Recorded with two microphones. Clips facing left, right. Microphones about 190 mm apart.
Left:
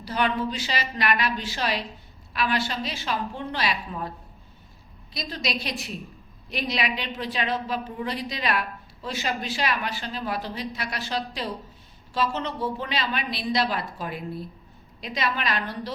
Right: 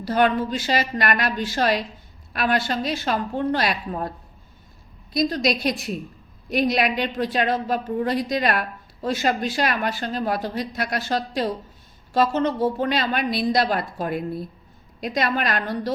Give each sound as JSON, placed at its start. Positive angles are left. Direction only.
{"t": 0.0, "sound": "a woman's voice", "side_deg": -50}
{"t": 5.1, "sound": "a woman's voice", "side_deg": -45}